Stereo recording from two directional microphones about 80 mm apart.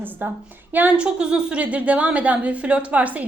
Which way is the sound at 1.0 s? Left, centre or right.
Centre.